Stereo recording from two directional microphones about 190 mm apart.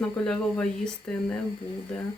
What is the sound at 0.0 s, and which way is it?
Speech, 5° left (ahead or behind).